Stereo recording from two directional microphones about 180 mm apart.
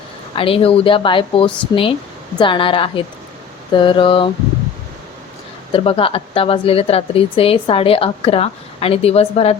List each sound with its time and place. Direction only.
0.3 s a woman's voice: 30° left (ahead or behind)
5.7 s speech: 30° left (ahead or behind)